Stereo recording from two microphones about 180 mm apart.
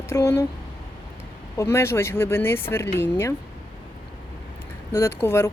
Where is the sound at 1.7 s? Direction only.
15° left (ahead or behind).